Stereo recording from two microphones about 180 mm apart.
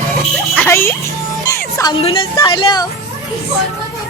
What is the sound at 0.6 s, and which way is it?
Speech, 10° left (ahead or behind).